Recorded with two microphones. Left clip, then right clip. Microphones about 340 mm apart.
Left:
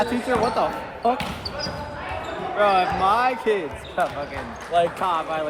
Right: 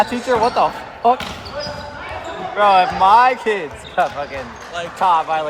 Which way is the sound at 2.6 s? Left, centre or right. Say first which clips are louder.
Right 7 dB; right.